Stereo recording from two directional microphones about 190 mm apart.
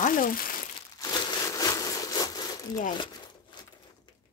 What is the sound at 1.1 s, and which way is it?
Crumpling, 20° left (ahead or behind).